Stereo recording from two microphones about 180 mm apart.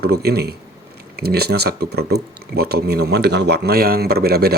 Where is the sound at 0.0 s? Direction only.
60° right (ahead or behind).